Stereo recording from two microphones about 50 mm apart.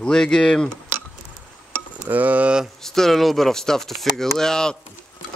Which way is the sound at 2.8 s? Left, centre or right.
Centre.